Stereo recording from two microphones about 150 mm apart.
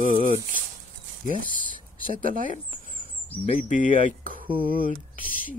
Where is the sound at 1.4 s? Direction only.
65° right (ahead or behind).